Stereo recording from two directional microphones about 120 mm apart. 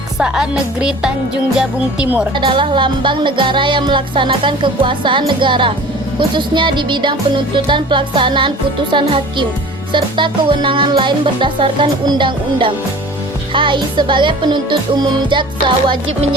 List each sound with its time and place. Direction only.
0.2 s a woman's voice: 5° right (ahead or behind)
2.3 s music: 45° right (ahead or behind)
6.1 s speech: 40° right (ahead or behind)
9.9 s music: 40° right (ahead or behind)
13.5 s speech: 45° right (ahead or behind)